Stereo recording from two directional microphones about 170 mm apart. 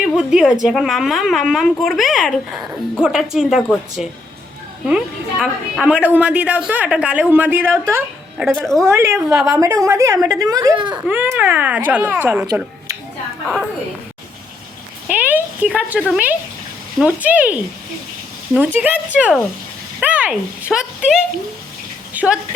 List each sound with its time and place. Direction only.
0.3 s a woman's voice: 5° right (ahead or behind)
8.5 s speech: centre (ahead or behind)
8.8 s a woman's voice: 15° right (ahead or behind)
11.0 s a woman's voice: 10° right (ahead or behind)
15.0 s a woman's voice: 10° right (ahead or behind)
22.1 s a sound: 10° right (ahead or behind)